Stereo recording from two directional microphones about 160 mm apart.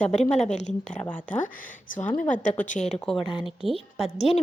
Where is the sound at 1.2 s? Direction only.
50° left (ahead or behind).